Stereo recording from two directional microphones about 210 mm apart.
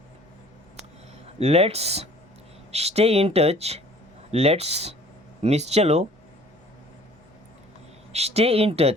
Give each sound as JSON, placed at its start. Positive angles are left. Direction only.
{"t": 1.4, "sound": "speech", "side_deg": -30}
{"t": 8.1, "sound": "speech", "side_deg": -30}